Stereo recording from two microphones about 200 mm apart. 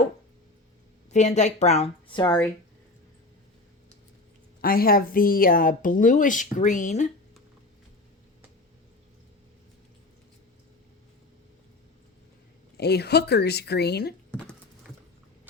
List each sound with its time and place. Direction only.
1.1 s a woman's voice: 35° left (ahead or behind)
4.6 s a woman's voice: 45° left (ahead or behind)
12.7 s a woman's voice: 55° left (ahead or behind)
14.3 s a sound: 5° left (ahead or behind)